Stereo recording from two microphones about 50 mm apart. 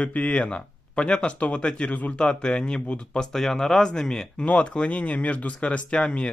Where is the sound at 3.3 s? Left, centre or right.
Centre.